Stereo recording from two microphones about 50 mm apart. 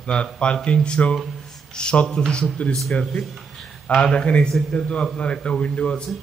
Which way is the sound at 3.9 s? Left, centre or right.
Centre.